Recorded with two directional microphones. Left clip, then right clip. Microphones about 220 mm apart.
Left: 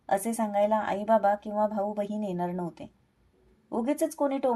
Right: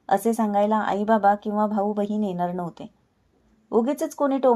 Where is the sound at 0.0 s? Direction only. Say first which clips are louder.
Right 6 dB; 25° right (ahead or behind).